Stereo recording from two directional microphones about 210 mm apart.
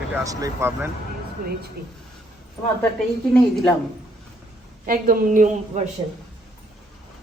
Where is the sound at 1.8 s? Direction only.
45° right (ahead or behind).